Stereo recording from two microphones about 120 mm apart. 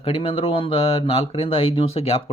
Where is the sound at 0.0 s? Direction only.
50° left (ahead or behind).